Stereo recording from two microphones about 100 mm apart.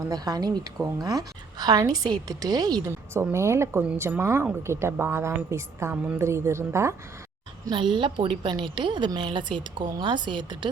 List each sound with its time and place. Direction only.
0.1 s a woman's voice: 40° right (ahead or behind)
2.8 s a woman's voice: 25° right (ahead or behind)
7.7 s a woman's voice: 50° right (ahead or behind)